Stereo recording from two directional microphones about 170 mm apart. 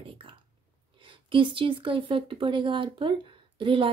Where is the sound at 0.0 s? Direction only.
30° right (ahead or behind).